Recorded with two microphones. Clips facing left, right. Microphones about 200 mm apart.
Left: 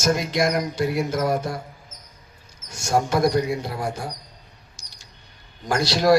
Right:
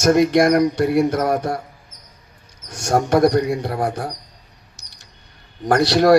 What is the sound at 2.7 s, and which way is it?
A man's voice, 70° right (ahead or behind).